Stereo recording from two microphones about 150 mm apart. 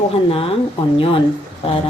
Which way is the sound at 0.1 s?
40° left (ahead or behind).